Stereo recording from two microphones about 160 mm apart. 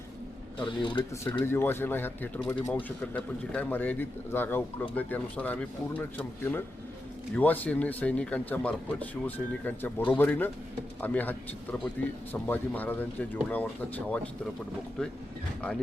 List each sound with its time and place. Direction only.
0.6 s speech: 30° left (ahead or behind)
1.2 s a man's voice: 15° left (ahead or behind)